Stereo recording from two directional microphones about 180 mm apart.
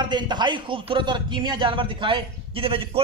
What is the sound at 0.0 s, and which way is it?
A man's voice, 25° right (ahead or behind).